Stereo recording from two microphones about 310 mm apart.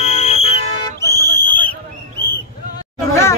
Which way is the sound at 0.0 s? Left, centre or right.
Left.